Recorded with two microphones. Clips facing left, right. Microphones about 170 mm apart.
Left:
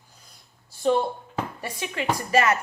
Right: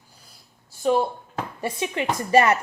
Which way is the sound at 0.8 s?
5° right (ahead or behind).